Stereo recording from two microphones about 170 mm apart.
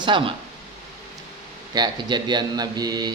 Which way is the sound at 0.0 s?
30° right (ahead or behind).